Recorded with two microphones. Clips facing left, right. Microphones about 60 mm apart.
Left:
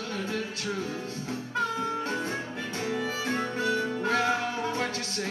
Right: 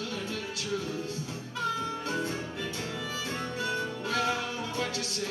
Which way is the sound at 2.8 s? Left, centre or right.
Left.